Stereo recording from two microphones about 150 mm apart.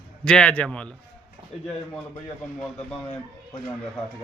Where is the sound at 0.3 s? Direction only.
5° left (ahead or behind).